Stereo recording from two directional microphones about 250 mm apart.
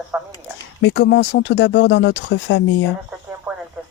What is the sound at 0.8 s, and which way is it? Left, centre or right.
Speech, left.